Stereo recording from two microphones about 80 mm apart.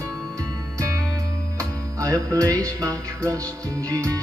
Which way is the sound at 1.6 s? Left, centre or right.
Right.